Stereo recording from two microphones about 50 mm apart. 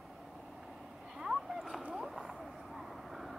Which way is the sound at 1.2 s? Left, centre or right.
Centre.